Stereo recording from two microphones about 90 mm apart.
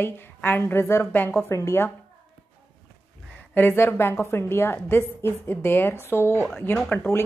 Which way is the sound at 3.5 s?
25° left (ahead or behind).